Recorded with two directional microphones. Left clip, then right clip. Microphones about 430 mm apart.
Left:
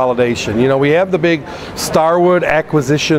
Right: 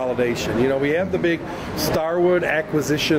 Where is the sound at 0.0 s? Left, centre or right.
Left.